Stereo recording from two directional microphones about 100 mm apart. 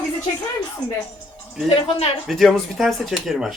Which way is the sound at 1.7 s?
75° left (ahead or behind).